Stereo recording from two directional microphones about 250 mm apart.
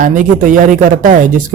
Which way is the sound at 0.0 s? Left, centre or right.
Right.